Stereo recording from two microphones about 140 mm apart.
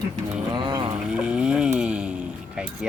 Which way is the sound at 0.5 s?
35° right (ahead or behind).